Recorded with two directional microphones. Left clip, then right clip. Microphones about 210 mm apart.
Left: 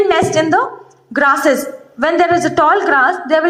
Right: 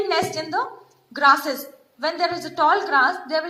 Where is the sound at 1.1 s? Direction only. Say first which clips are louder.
Left 6 dB; 45° left (ahead or behind).